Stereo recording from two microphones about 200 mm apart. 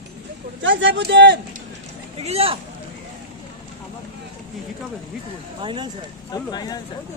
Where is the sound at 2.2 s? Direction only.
30° right (ahead or behind).